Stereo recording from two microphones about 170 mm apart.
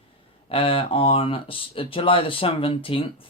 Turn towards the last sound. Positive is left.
turn(degrees=30)  # may be behind; listen again after turning